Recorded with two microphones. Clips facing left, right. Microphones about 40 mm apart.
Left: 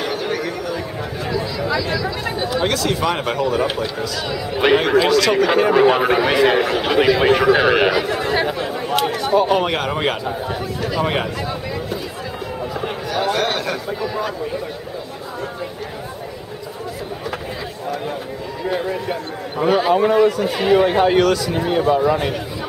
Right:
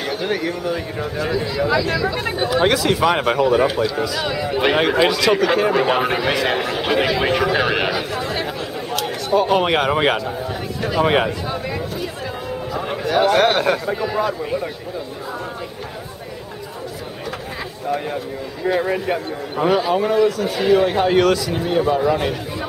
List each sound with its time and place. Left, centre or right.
0.2 s speech: centre
5.4 s speech: centre
7.9 s speech: left
9.3 s speech: centre
9.6 s speech: centre
13.0 s a man's voice: right
19.5 s a man's voice: centre